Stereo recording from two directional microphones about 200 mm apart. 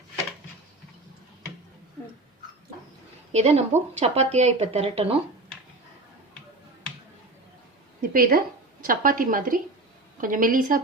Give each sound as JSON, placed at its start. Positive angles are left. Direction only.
{"t": 3.3, "sound": "speech", "side_deg": -35}
{"t": 8.1, "sound": "a woman's voice", "side_deg": -45}